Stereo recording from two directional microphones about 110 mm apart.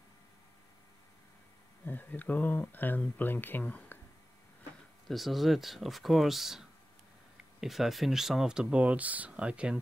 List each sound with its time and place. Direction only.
1.9 s speech: 15° left (ahead or behind)
5.0 s speech: centre (ahead or behind)
7.6 s speech: centre (ahead or behind)